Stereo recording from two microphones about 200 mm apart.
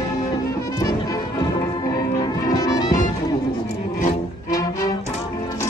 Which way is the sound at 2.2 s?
15° left (ahead or behind).